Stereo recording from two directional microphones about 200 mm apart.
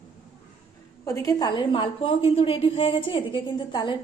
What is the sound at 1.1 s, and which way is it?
A woman's voice, 15° left (ahead or behind).